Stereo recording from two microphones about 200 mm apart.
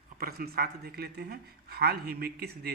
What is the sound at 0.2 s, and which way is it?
A man's voice, 50° right (ahead or behind).